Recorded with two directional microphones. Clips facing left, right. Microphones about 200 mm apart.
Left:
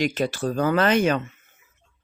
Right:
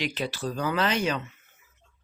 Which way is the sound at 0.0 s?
45° left (ahead or behind).